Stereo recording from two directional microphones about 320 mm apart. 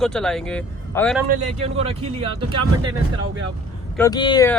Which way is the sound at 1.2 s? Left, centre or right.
Centre.